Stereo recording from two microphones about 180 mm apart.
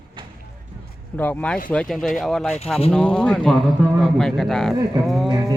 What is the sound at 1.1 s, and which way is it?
A man's voice, 10° left (ahead or behind).